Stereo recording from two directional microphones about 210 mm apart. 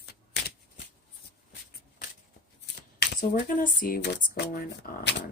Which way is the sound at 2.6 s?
55° left (ahead or behind).